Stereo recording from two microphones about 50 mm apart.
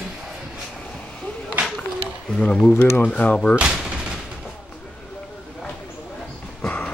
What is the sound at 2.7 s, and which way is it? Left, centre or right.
Speech, left.